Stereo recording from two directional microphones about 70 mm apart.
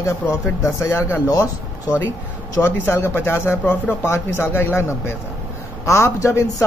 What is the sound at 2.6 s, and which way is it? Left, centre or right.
A man's voice, left.